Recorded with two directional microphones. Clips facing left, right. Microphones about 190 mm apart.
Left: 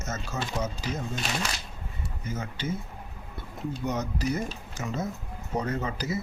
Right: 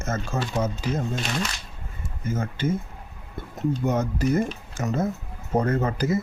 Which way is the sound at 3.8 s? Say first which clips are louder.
Right 3 dB; 50° right (ahead or behind).